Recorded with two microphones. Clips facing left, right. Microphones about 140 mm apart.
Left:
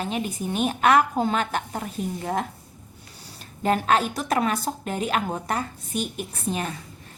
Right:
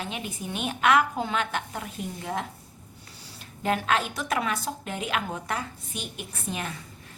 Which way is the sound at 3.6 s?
40° left (ahead or behind).